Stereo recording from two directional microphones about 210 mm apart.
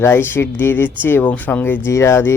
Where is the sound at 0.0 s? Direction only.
10° left (ahead or behind).